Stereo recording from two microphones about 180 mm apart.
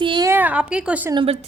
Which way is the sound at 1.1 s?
35° right (ahead or behind).